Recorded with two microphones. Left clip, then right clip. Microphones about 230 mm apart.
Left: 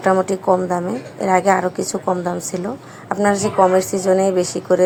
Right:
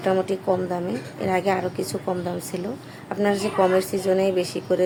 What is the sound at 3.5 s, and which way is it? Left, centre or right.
Speech, centre.